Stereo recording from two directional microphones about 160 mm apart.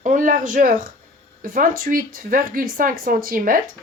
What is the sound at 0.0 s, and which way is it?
Speech, 55° right (ahead or behind).